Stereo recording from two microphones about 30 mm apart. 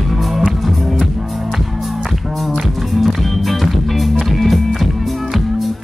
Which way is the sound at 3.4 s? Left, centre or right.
Centre.